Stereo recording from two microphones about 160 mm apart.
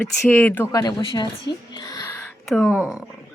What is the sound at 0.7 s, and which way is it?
Speech, 30° left (ahead or behind).